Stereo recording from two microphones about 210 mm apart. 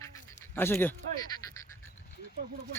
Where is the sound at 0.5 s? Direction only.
10° left (ahead or behind).